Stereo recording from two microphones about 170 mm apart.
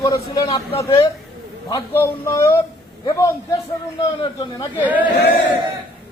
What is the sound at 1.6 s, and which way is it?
A man's voice, 15° left (ahead or behind).